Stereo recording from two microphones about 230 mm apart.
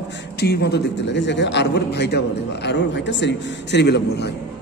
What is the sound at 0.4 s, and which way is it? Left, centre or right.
A man's voice, left.